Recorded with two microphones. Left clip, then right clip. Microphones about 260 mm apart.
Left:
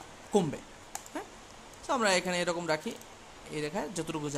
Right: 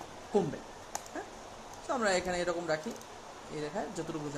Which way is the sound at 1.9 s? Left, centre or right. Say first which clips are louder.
Left 3 dB; left.